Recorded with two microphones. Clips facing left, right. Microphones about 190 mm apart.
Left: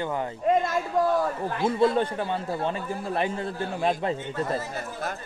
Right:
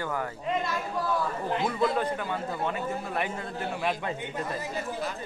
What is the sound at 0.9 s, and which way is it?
Chatter, 45° left (ahead or behind).